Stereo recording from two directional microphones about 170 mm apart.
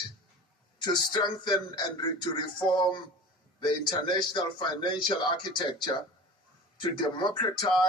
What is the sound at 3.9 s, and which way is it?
Speech, 25° left (ahead or behind).